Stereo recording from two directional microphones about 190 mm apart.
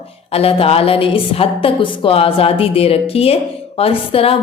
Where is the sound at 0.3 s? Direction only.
30° left (ahead or behind).